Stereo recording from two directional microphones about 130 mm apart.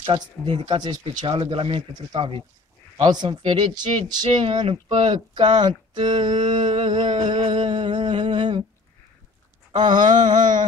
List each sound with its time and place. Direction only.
0.0 s speech: 40° right (ahead or behind)
9.7 s a sound: 35° right (ahead or behind)
10.2 s music: 75° right (ahead or behind)